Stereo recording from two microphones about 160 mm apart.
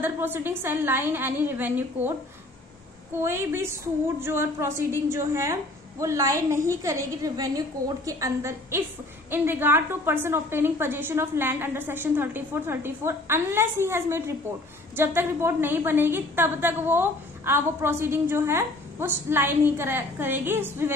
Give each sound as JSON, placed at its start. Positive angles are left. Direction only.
{"t": 0.0, "sound": "a woman's voice", "side_deg": -15}
{"t": 3.2, "sound": "a woman's voice", "side_deg": -15}